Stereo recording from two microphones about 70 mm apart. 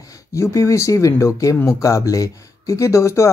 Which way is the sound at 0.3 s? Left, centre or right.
Left.